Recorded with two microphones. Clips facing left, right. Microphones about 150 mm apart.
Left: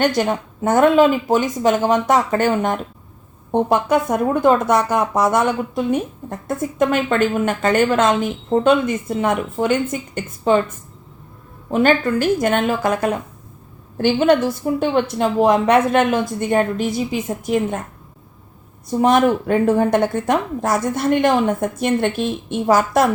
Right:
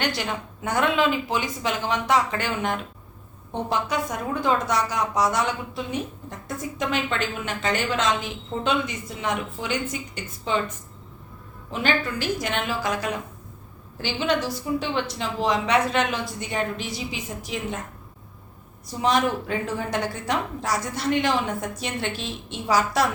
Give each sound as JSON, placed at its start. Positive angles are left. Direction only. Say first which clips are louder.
{"t": 0.0, "sound": "a woman's voice", "louder": "left 10 dB", "side_deg": 45}
{"t": 11.7, "sound": "a woman's voice", "louder": "left 10 dB", "side_deg": 50}
{"t": 18.9, "sound": "a woman's voice", "louder": "left 8 dB", "side_deg": 55}